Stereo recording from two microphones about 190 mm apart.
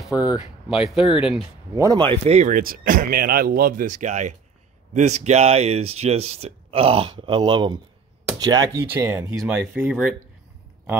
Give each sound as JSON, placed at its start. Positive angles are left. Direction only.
{"t": 0.1, "sound": "speech", "side_deg": 20}
{"t": 0.7, "sound": "speech", "side_deg": 0}
{"t": 1.8, "sound": "speech", "side_deg": -20}